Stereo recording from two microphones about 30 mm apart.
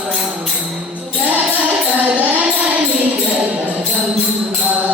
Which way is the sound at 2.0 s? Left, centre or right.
Right.